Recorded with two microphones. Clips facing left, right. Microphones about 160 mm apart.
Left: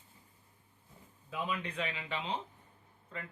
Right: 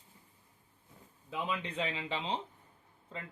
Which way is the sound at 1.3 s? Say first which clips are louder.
Right 1 dB; 25° right (ahead or behind).